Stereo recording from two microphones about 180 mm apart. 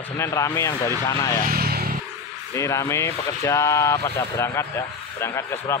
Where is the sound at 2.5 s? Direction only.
15° left (ahead or behind).